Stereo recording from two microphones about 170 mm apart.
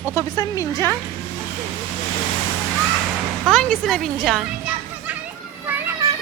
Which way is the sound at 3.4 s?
5° left (ahead or behind).